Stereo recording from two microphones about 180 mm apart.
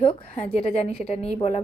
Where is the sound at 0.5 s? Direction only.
40° left (ahead or behind).